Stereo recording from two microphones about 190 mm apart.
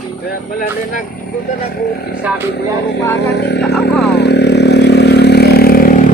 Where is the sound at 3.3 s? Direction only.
60° left (ahead or behind).